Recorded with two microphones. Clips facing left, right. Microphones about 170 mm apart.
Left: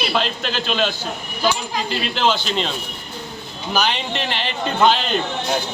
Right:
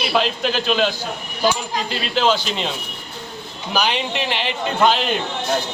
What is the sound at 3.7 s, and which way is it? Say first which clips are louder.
A man's voice: right 1 dB; 5° right (ahead or behind).